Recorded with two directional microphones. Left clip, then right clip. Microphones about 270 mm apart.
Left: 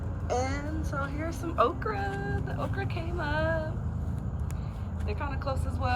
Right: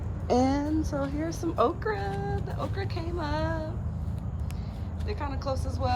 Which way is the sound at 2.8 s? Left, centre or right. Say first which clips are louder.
Right 1 dB; centre.